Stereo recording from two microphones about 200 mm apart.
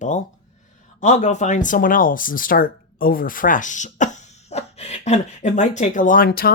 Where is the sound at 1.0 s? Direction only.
35° left (ahead or behind).